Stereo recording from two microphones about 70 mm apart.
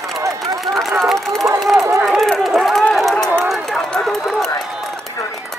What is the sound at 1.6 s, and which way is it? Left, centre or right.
Run, centre.